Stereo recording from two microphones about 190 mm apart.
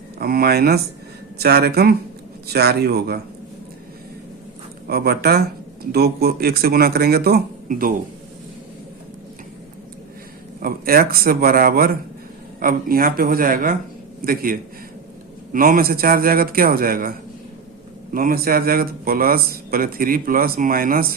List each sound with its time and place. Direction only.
0.2 s speech: 55° right (ahead or behind)
4.9 s speech: 55° right (ahead or behind)
10.6 s speech: 50° right (ahead or behind)
15.5 s speech: 45° right (ahead or behind)